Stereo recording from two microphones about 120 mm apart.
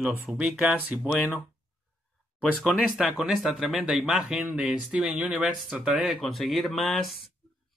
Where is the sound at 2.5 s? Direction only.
Centre (ahead or behind).